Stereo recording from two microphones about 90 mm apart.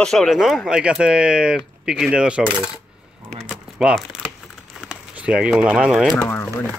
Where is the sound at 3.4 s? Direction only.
10° right (ahead or behind).